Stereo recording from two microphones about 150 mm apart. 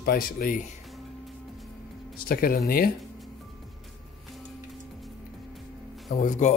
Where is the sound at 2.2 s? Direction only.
80° left.